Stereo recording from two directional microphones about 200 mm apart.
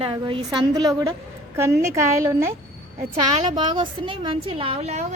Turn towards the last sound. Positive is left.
turn(degrees=-35)  # may be behind; listen again after turning